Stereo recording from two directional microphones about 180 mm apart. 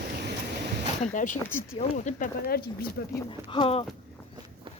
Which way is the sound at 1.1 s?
45° left (ahead or behind).